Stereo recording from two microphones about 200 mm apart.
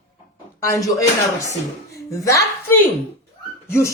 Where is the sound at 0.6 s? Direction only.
15° left (ahead or behind).